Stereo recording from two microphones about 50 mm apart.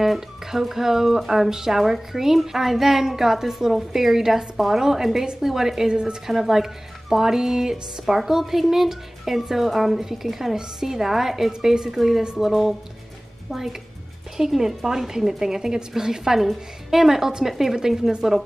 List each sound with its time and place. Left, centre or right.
0.0 s speech: centre
6.2 s a woman's voice: centre